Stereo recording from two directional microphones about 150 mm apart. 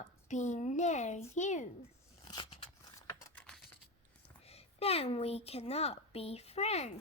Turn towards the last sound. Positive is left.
turn(degrees=45)  # may be behind; listen again after turning